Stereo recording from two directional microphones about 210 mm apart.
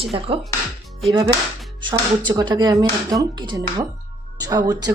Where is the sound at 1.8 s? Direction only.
20° right (ahead or behind).